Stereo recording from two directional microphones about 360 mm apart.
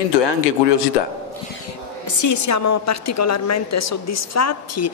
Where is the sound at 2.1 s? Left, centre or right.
Left.